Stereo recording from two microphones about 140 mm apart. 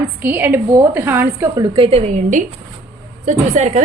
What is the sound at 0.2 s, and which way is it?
A woman's voice, 15° right (ahead or behind).